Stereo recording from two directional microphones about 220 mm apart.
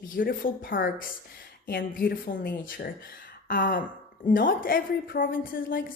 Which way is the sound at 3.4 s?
40° left (ahead or behind).